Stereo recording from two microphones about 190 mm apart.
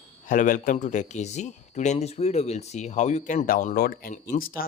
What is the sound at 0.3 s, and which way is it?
Speech, 45° left (ahead or behind).